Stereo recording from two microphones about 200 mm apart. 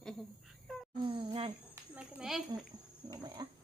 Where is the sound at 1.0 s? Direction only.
25° right (ahead or behind).